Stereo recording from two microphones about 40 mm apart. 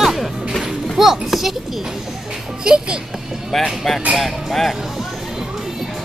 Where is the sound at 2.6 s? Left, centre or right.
Right.